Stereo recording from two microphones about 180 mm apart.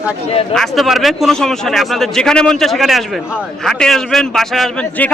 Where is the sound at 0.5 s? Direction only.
Centre (ahead or behind).